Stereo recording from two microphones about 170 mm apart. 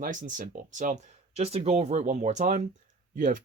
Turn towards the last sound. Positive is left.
turn(degrees=-50)  # may be behind; listen again after turning